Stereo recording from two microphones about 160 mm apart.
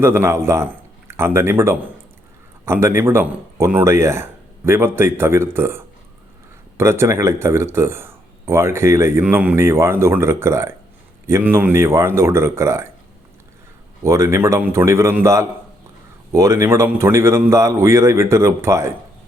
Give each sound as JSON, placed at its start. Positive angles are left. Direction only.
{"t": 0.0, "sound": "a man's voice", "side_deg": -15}
{"t": 14.0, "sound": "speech", "side_deg": -15}